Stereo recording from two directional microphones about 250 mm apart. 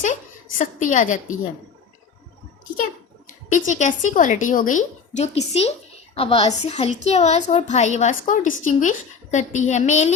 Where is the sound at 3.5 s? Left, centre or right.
Left.